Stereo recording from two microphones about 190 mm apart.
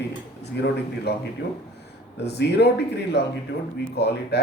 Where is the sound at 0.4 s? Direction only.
60° left (ahead or behind).